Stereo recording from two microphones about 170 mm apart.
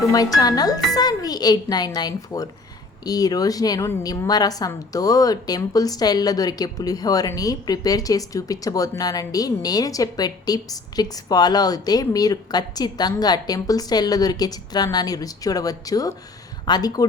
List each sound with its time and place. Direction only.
0.1 s a woman's voice: 20° left (ahead or behind)